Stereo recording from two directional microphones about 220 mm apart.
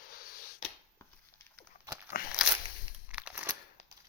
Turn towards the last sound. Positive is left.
turn(degrees=-5)  # may be behind; listen again after turning